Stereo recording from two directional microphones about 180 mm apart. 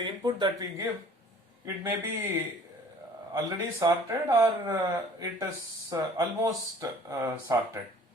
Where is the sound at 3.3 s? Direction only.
20° right (ahead or behind).